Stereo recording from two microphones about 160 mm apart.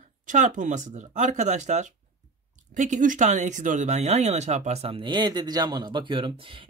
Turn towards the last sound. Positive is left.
turn(degrees=-30)  # may be behind; listen again after turning